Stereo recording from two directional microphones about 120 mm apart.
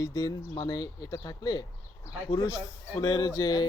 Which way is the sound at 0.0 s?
30° left (ahead or behind).